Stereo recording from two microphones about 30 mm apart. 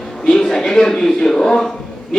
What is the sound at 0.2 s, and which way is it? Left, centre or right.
A man's voice, centre.